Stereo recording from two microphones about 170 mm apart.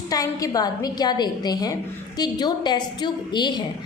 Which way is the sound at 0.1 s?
20° left (ahead or behind).